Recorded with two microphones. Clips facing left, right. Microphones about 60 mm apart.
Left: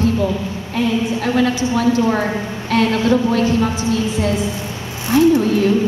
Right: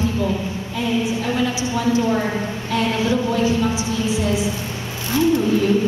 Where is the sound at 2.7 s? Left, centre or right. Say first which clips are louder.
Left 5 dB; left.